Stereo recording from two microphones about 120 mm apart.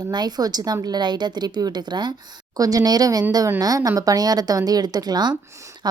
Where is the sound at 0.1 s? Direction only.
35° right (ahead or behind).